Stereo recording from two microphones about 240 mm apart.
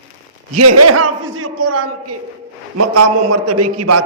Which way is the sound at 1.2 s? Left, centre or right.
Right.